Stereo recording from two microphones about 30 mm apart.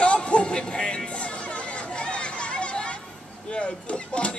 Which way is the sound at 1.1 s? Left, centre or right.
Left.